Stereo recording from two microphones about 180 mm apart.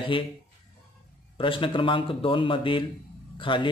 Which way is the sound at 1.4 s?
30° left (ahead or behind).